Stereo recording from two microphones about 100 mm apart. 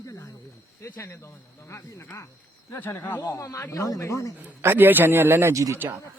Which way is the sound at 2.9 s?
20° left (ahead or behind).